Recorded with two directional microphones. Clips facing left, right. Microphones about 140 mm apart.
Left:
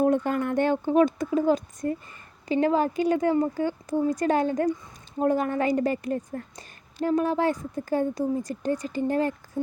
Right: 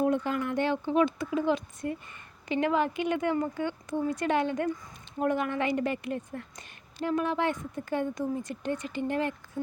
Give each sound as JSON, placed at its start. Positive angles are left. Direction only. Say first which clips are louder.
{"t": 0.0, "sound": "a woman's voice", "louder": "left 4 dB", "side_deg": 50}